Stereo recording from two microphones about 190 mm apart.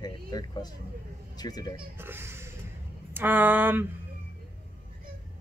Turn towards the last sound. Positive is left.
turn(degrees=-10)  # may be behind; listen again after turning